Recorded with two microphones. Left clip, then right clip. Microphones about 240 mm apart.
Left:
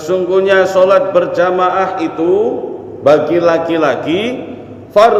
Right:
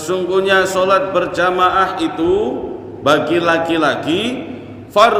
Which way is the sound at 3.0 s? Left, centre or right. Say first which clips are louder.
Left 4 dB; right.